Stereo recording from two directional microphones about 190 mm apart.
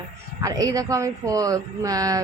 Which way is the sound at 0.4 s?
20° right (ahead or behind).